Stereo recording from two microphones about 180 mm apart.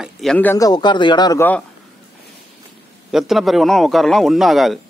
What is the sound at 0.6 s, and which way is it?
Speech, 25° left (ahead or behind).